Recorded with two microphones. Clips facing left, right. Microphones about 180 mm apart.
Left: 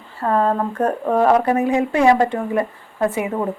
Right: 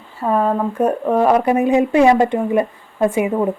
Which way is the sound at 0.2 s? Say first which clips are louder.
Right 1 dB; 10° right (ahead or behind).